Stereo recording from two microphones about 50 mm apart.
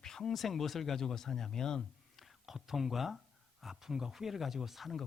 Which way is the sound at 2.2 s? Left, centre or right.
Centre.